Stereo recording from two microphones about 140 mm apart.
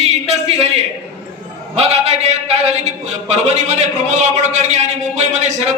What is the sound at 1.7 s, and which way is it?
A man's voice, 50° right (ahead or behind).